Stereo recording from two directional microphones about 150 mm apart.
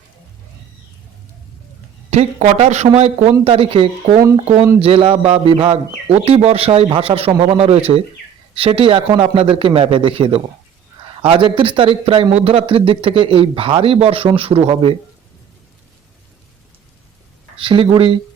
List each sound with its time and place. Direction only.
2.0 s a man's voice: 50° right (ahead or behind)
17.6 s a man's voice: 35° right (ahead or behind)